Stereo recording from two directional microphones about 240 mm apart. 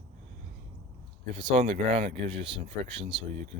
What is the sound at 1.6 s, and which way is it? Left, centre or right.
Speech, right.